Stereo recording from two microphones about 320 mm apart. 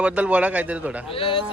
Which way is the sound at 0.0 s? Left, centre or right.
Centre.